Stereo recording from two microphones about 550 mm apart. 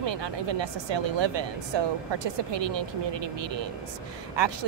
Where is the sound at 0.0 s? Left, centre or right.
Right.